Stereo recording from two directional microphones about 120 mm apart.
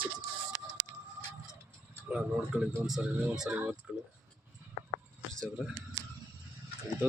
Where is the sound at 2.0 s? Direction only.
10° right (ahead or behind).